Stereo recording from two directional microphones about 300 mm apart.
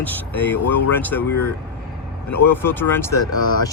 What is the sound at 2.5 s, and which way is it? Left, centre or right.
Speech, centre.